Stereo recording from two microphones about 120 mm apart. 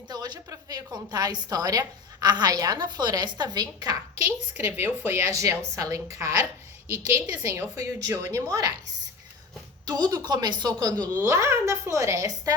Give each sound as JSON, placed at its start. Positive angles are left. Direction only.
{"t": 0.1, "sound": "a woman's voice", "side_deg": -35}
{"t": 4.5, "sound": "a woman's voice", "side_deg": -20}
{"t": 9.8, "sound": "a woman's voice", "side_deg": -35}
{"t": 10.9, "sound": "speech", "side_deg": 15}
{"t": 11.3, "sound": "a woman's voice", "side_deg": -25}